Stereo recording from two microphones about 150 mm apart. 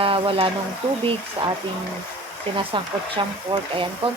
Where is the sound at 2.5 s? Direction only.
35° right (ahead or behind).